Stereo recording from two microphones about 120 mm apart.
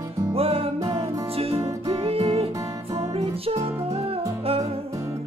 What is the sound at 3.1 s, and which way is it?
Music, 55° right (ahead or behind).